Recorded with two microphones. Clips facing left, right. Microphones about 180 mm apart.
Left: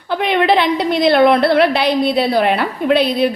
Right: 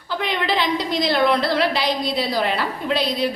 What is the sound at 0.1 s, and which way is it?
A woman's voice, 60° left (ahead or behind).